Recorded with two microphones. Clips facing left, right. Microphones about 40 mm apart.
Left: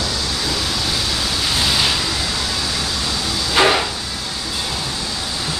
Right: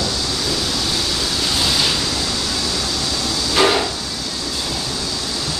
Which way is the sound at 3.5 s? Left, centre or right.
Centre.